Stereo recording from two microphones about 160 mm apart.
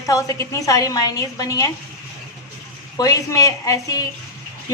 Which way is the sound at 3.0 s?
20° left (ahead or behind).